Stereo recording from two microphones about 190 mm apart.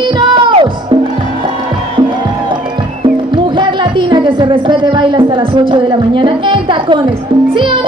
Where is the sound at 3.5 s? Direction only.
25° right (ahead or behind).